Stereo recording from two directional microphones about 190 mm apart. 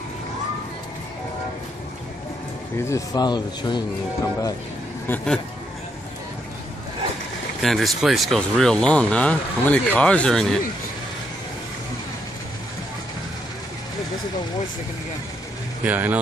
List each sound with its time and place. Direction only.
2.8 s speech: 15° left (ahead or behind)
5.0 s speech: 5° left (ahead or behind)
7.6 s speech: centre (ahead or behind)
15.8 s speech: 10° right (ahead or behind)